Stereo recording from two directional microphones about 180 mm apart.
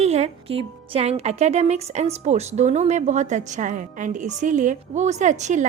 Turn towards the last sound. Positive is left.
turn(degrees=-40)  # may be behind; listen again after turning